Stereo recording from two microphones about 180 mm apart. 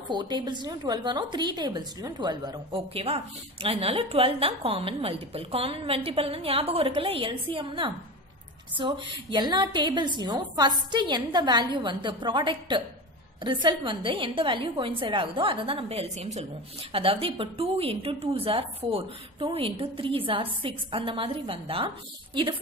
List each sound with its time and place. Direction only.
0.1 s a woman's voice: 25° right (ahead or behind)